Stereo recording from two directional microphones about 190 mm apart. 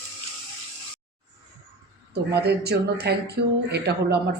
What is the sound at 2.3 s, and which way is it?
Speech, 60° right (ahead or behind).